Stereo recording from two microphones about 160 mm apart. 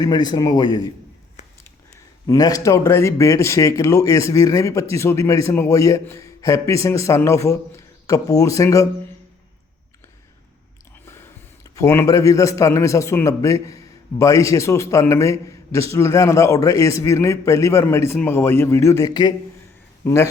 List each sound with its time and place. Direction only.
0.0 s a man's voice: 25° left (ahead or behind)
2.2 s a man's voice: 20° left (ahead or behind)
11.0 s a sound: 15° left (ahead or behind)
11.7 s a man's voice: 20° left (ahead or behind)